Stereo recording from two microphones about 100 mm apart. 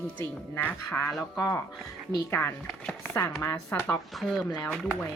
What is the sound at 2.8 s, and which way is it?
Speech, 15° left (ahead or behind).